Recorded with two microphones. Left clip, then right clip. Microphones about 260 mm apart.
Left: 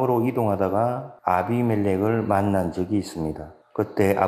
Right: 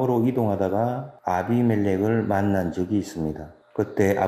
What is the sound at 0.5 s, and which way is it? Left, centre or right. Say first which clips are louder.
A man's voice: left 2 dB; centre.